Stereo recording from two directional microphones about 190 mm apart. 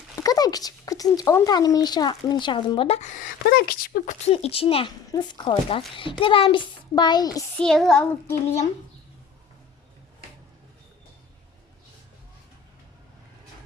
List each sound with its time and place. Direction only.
0.2 s speech: 20° left (ahead or behind)
3.4 s speech: 50° left (ahead or behind)
4.3 s speech: 30° left (ahead or behind)
7.6 s child singing: centre (ahead or behind)